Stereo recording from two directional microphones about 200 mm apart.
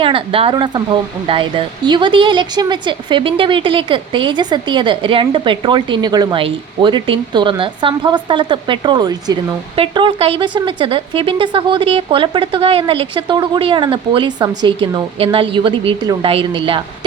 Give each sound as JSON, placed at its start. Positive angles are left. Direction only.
{"t": 0.0, "sound": "a woman's voice", "side_deg": -25}